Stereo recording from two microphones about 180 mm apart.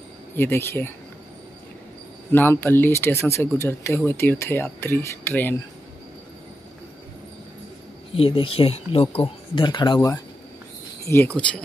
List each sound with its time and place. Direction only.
0.4 s speech: 15° left (ahead or behind)
2.3 s speech: 10° left (ahead or behind)
8.2 s speech: 30° left (ahead or behind); by 11.4 s 10° left (ahead or behind)